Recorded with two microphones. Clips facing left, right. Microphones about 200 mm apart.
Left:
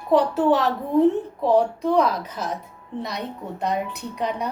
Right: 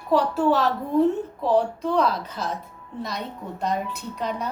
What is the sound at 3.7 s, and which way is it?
Speech, 65° left (ahead or behind).